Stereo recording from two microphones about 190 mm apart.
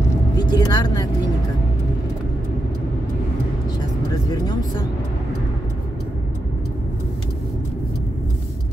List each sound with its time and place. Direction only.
0.4 s vehicle: 20° left (ahead or behind)
4.1 s vehicle: 20° left (ahead or behind)